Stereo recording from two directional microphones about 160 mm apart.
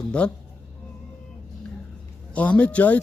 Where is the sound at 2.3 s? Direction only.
10° left (ahead or behind).